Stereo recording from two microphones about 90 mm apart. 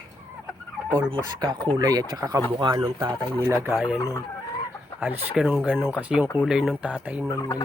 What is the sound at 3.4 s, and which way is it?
Speech, 30° right (ahead or behind).